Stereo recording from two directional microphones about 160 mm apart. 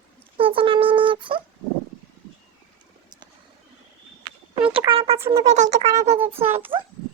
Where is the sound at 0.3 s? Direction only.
35° right (ahead or behind).